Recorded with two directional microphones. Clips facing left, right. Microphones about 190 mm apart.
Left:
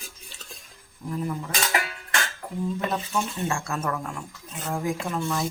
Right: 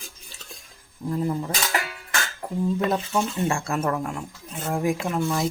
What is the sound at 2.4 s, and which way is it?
Dishes, 35° right (ahead or behind).